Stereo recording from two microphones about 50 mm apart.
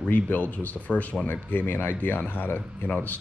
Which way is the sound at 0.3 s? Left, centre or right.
Left.